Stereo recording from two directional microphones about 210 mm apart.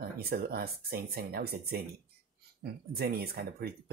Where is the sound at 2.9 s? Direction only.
50° right (ahead or behind).